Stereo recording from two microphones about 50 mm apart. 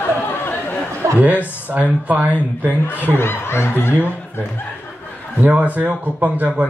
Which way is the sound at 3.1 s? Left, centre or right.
Left.